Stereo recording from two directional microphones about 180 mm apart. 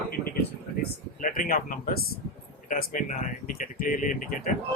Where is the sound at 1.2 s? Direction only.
50° left (ahead or behind).